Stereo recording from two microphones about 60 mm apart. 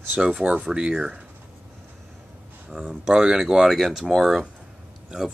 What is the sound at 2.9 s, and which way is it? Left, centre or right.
Speech, centre.